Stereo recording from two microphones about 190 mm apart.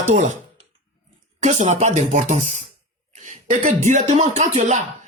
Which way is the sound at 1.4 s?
35° right (ahead or behind).